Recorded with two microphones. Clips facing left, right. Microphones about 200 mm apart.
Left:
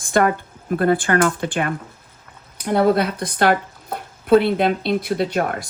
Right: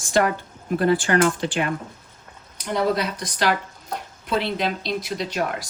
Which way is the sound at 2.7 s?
55° left (ahead or behind).